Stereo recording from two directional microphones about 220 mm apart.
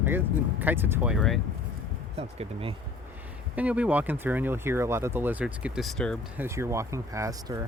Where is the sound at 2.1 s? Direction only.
25° right (ahead or behind).